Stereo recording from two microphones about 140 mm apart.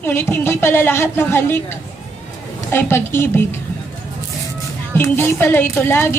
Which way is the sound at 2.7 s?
15° left (ahead or behind).